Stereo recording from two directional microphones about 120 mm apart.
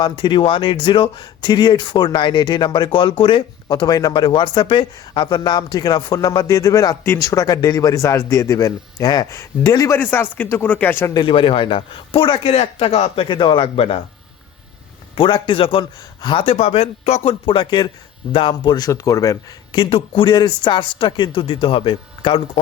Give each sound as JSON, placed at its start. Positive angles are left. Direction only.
{"t": 0.0, "sound": "speech", "side_deg": 40}
{"t": 10.0, "sound": "speech", "side_deg": 15}
{"t": 11.1, "sound": "speech", "side_deg": 45}
{"t": 13.2, "sound": "speech", "side_deg": 40}
{"t": 15.1, "sound": "speech", "side_deg": 45}
{"t": 19.8, "sound": "speech", "side_deg": 45}